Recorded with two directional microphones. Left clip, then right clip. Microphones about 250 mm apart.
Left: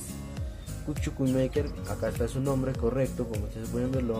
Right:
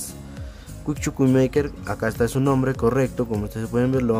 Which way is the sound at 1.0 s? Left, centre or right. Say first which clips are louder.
Right 9 dB; right.